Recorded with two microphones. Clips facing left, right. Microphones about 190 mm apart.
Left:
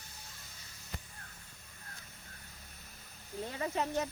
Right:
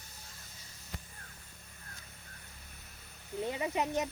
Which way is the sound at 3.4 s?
15° right (ahead or behind).